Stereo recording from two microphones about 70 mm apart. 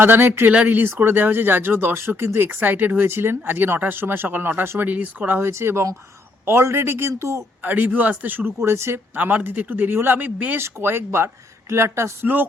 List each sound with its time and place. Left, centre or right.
0.0 s speech: right
7.6 s speech: right
8.5 s speech: right
9.1 s speech: right
10.6 s speech: right